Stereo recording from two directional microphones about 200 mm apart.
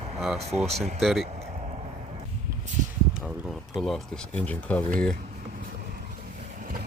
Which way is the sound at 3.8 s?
5° left (ahead or behind).